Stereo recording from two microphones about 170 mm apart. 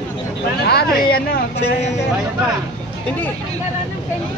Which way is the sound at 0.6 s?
65° left (ahead or behind).